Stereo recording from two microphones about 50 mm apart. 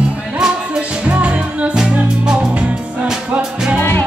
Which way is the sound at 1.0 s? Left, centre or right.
Right.